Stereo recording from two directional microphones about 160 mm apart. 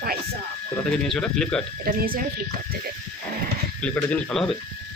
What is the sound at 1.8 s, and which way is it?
Speech, 65° right (ahead or behind).